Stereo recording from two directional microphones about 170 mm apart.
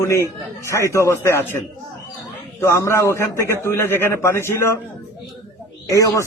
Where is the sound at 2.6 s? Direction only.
15° left (ahead or behind).